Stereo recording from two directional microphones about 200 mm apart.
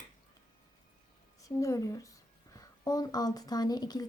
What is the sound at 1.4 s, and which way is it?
A woman's voice, 15° left (ahead or behind).